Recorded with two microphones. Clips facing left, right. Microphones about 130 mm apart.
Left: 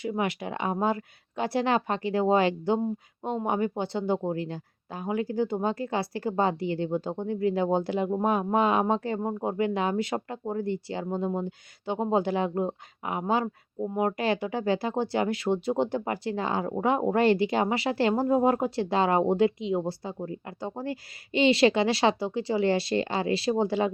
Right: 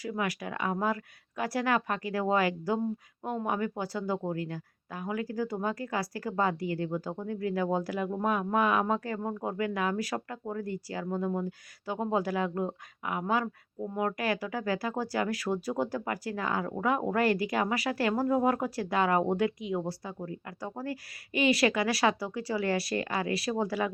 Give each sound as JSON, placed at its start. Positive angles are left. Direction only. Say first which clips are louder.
{"t": 0.0, "sound": "speech", "louder": "left 4 dB", "side_deg": 25}